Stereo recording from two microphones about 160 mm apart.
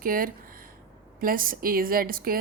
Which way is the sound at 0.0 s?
60° right (ahead or behind).